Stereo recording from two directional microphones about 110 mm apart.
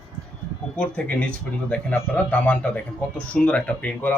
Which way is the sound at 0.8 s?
10° left (ahead or behind).